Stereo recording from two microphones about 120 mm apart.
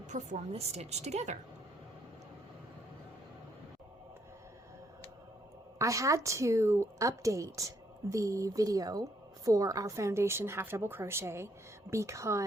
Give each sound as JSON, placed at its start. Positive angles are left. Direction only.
{"t": 0.1, "sound": "a woman's voice", "side_deg": -75}
{"t": 5.8, "sound": "a woman's voice", "side_deg": -25}